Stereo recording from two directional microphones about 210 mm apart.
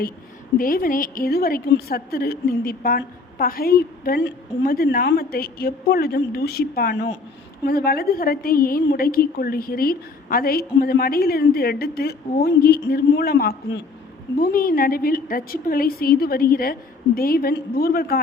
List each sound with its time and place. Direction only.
0.6 s a woman's voice: 40° left (ahead or behind)